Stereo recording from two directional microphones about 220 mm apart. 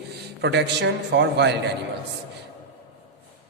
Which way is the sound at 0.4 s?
50° right (ahead or behind).